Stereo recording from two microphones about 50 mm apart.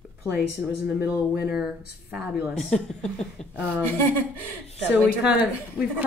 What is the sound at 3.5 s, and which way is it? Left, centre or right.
Speech, right.